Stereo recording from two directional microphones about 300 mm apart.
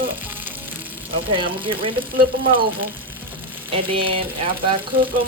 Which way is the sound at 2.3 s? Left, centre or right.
Right.